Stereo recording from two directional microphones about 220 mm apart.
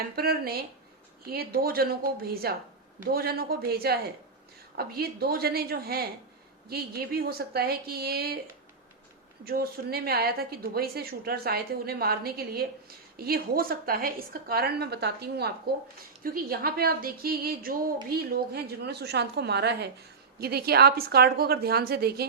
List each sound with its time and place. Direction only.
0.0 s a woman's voice: 45° right (ahead or behind)
9.4 s a woman's voice: 45° right (ahead or behind)